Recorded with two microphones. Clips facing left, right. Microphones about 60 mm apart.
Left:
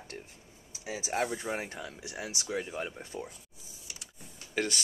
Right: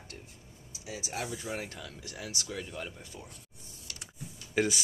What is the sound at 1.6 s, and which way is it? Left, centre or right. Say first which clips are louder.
Speech: left 2 dB; left.